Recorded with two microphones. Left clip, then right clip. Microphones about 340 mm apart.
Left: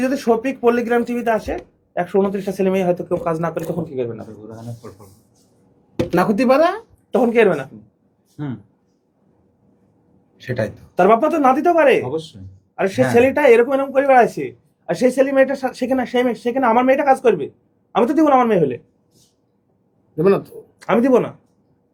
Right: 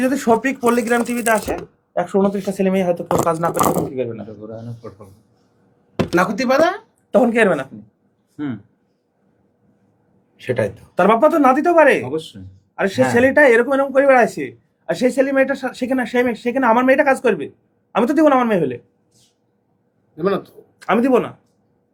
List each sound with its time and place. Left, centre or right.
0.0 s speech: centre
6.1 s speech: left
7.1 s speech: centre
10.3 s speech: right
10.9 s speech: centre
20.1 s speech: left
20.7 s speech: centre